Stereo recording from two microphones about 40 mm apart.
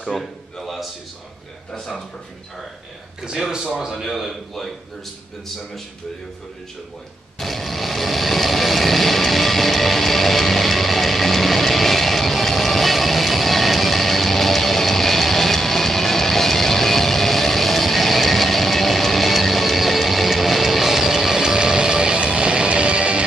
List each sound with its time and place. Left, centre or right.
0.1 s a man's voice: centre
3.3 s speech: centre
3.9 s a man's voice: centre
7.3 s vehicle: centre; by 23.2 s right